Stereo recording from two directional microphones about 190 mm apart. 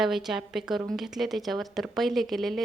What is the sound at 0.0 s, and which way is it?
Speech, centre (ahead or behind).